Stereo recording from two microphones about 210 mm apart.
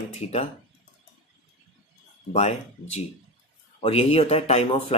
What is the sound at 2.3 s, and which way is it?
Speech, 30° left (ahead or behind).